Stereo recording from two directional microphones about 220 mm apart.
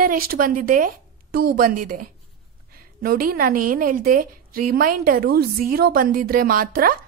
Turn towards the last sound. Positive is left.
turn(degrees=-40)  # may be behind; listen again after turning